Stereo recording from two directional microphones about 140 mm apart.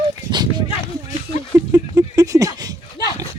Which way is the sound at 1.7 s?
25° right (ahead or behind).